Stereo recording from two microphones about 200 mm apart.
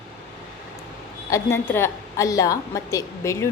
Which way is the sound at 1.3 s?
10° left (ahead or behind).